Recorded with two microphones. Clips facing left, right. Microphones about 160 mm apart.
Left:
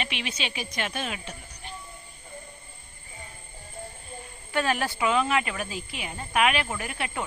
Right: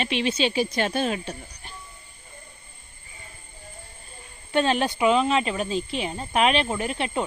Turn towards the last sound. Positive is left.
turn(degrees=-25)  # may be behind; listen again after turning